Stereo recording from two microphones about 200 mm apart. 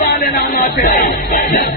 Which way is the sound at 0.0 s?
50° left (ahead or behind).